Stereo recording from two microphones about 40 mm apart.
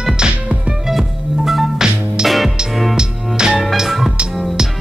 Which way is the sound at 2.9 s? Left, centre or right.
Right.